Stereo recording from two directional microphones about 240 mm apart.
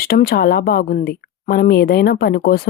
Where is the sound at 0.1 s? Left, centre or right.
Left.